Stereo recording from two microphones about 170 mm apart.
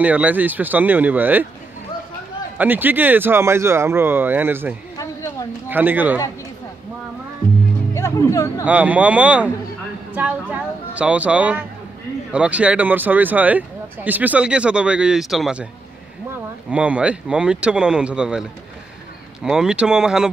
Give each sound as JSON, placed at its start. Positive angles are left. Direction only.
{"t": 0.0, "sound": "speech", "side_deg": -10}
{"t": 2.5, "sound": "speech", "side_deg": -10}
{"t": 4.9, "sound": "a sound", "side_deg": 20}
{"t": 5.7, "sound": "speech", "side_deg": -10}
{"t": 7.9, "sound": "speech", "side_deg": 15}
{"t": 8.6, "sound": "speech", "side_deg": -10}
{"t": 16.7, "sound": "speech", "side_deg": -5}